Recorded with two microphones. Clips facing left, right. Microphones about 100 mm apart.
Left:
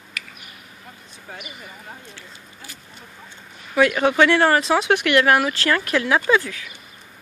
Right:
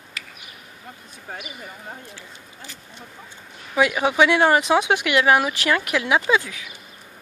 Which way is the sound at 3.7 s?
15° right (ahead or behind).